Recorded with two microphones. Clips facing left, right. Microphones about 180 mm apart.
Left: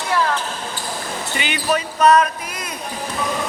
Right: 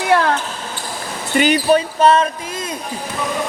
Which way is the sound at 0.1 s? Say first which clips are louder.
Right 5 dB; 65° right (ahead or behind).